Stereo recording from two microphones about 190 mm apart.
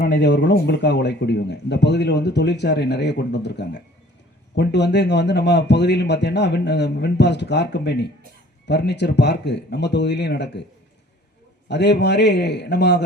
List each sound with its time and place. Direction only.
0.2 s speech: 65° left (ahead or behind)
11.7 s speech: 65° left (ahead or behind)